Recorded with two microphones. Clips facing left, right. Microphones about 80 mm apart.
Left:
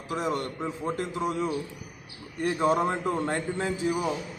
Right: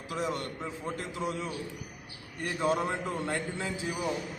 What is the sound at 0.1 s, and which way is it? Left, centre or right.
A man's voice, left.